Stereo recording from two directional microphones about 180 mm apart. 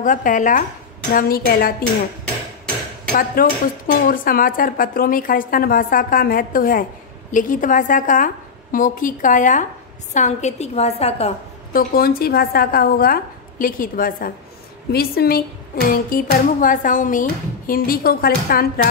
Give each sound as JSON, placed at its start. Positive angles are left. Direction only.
{"t": 0.0, "sound": "a woman's voice", "side_deg": 45}
{"t": 3.2, "sound": "a woman's voice", "side_deg": 50}
{"t": 11.7, "sound": "a woman's voice", "side_deg": 55}